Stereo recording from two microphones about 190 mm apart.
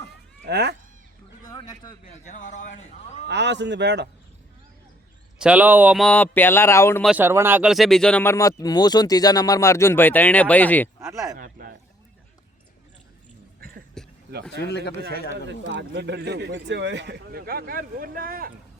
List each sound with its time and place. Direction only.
0.4 s speech: 60° right (ahead or behind)
1.5 s speech: 20° left (ahead or behind)
2.2 s speech: 40° left (ahead or behind)
3.2 s speech: 65° right (ahead or behind)
5.4 s speech: 5° right (ahead or behind)
6.0 s speech: 5° left (ahead or behind)
7.0 s speech: 5° right (ahead or behind); by 10.8 s 10° left (ahead or behind)
11.0 s speech: 15° right (ahead or behind)
11.3 s speech: 45° right (ahead or behind)
14.0 s a sound: 5° left (ahead or behind)
15.4 s speech: 70° right (ahead or behind); by 18.5 s 50° right (ahead or behind)